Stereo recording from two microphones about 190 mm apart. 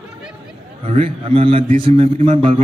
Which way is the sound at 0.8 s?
30° right (ahead or behind).